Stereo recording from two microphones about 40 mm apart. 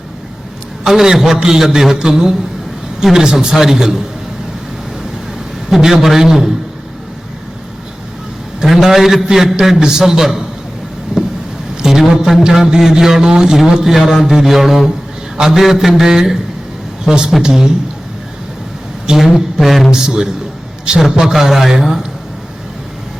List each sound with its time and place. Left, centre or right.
0.9 s speech: centre
5.8 s speech: centre
8.6 s a man's voice: centre
11.1 s vehicle: right
11.8 s a man's voice: centre
19.0 s a woman's voice: centre
19.9 s speech: centre